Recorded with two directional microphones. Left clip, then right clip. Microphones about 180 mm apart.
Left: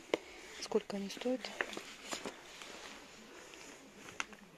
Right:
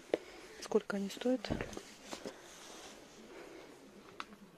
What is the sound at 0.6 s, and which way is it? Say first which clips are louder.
Speech: right 2 dB; 15° right (ahead or behind).